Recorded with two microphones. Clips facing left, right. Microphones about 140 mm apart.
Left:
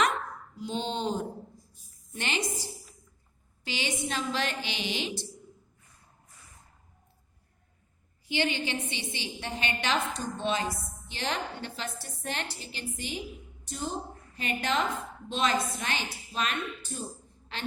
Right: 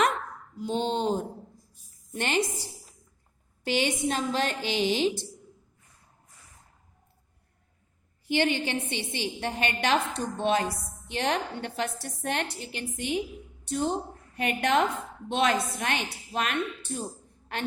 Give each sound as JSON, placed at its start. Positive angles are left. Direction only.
{"t": 0.5, "sound": "a woman's voice", "side_deg": -50}
{"t": 3.6, "sound": "a woman's voice", "side_deg": -55}
{"t": 8.3, "sound": "a woman's voice", "side_deg": -50}